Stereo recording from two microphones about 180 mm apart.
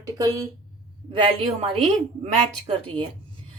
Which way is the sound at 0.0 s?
20° right (ahead or behind).